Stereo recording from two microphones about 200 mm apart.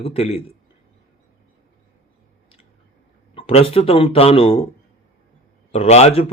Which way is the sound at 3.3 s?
30° left (ahead or behind).